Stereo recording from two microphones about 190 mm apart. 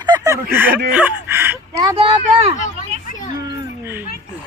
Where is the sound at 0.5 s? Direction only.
10° right (ahead or behind).